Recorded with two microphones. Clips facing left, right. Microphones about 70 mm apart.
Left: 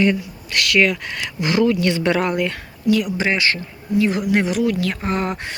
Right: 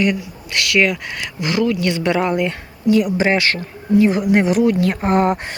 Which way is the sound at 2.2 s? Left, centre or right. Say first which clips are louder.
Right 2 dB; centre.